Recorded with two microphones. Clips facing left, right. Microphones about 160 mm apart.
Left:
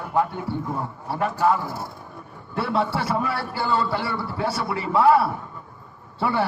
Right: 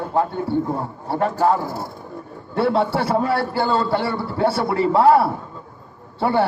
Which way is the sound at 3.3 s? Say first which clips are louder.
Right 7 dB; 60° right (ahead or behind).